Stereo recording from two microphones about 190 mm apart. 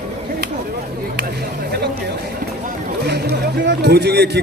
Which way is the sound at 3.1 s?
60° right (ahead or behind).